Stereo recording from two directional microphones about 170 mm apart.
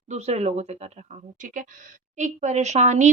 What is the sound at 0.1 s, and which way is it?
Speech, 40° right (ahead or behind).